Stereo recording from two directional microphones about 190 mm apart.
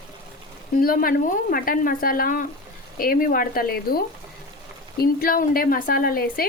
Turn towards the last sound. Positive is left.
turn(degrees=50)  # may be behind; listen again after turning